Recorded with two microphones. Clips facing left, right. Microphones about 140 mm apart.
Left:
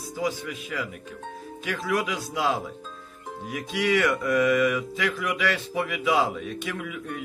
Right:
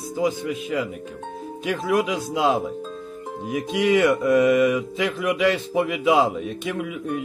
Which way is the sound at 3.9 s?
45° right (ahead or behind).